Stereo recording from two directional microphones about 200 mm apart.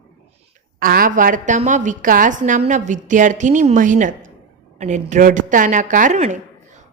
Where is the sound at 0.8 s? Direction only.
45° right (ahead or behind).